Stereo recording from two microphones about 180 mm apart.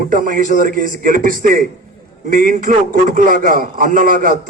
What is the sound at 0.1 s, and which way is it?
A man's voice, 45° right (ahead or behind).